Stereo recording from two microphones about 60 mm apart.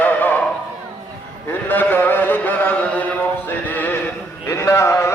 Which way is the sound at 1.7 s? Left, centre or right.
Left.